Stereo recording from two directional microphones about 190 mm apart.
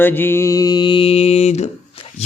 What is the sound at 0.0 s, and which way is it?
A man's voice, 10° left (ahead or behind).